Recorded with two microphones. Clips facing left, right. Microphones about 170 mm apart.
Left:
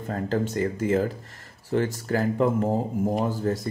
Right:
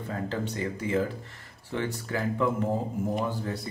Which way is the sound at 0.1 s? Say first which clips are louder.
Left 6 dB; 45° left (ahead or behind).